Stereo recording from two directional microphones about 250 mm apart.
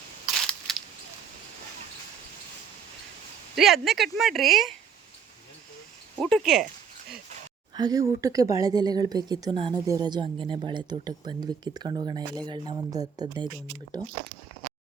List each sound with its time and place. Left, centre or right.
3.5 s speech: centre
6.1 s speech: centre
7.8 s a woman's voice: centre